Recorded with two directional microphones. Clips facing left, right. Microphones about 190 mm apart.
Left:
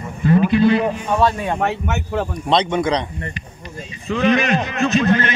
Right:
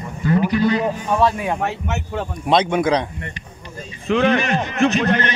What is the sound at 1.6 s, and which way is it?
Speech, 60° left (ahead or behind).